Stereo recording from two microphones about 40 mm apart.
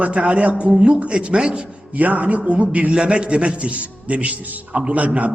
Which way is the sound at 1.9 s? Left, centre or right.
Right.